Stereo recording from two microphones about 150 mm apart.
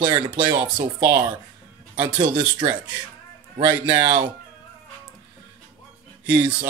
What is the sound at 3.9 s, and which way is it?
Speech, 30° right (ahead or behind).